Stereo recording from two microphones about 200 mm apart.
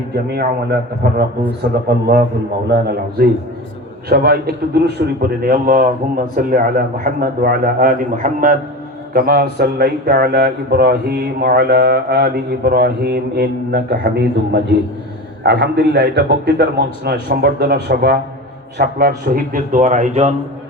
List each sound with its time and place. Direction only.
0.3 s speech: 55° right (ahead or behind); by 20.3 s 35° right (ahead or behind)